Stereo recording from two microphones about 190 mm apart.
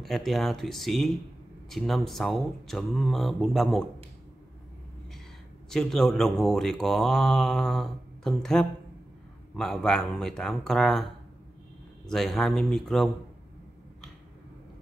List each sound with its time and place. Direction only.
0.0 s speech: centre (ahead or behind)
5.7 s speech: centre (ahead or behind)
12.1 s speech: centre (ahead or behind)